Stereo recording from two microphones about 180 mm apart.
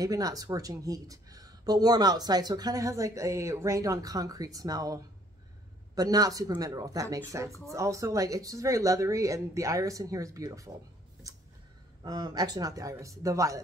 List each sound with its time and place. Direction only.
0.0 s speech: 20° right (ahead or behind)
12.0 s speech: 25° right (ahead or behind)